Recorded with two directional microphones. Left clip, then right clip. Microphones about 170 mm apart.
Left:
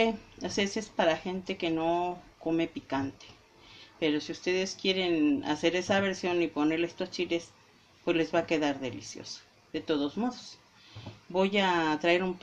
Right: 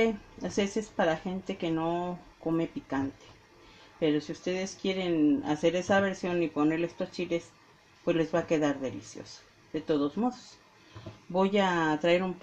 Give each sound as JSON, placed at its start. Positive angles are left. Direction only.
{"t": 0.9, "sound": "speech", "side_deg": -15}
{"t": 4.0, "sound": "speech", "side_deg": -15}
{"t": 11.3, "sound": "speech", "side_deg": -20}